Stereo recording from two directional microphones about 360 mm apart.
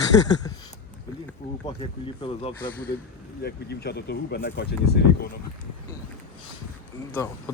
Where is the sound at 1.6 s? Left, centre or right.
Centre.